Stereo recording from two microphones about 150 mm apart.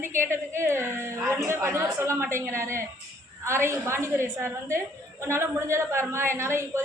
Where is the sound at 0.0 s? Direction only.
15° right (ahead or behind).